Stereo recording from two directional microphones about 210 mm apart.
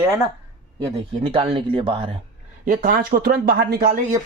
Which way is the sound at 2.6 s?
45° right (ahead or behind).